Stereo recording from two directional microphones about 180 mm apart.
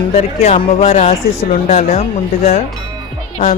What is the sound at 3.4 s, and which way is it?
Speech, 40° left (ahead or behind).